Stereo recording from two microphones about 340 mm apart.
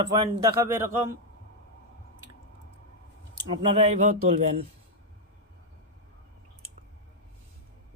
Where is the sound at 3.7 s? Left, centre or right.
Centre.